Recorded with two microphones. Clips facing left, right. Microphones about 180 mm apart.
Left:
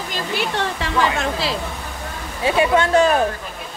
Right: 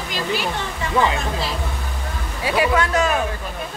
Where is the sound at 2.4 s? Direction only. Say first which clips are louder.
Left 2 dB; 25° left (ahead or behind).